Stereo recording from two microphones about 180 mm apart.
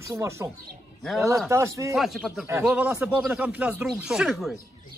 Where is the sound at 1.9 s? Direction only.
Centre (ahead or behind).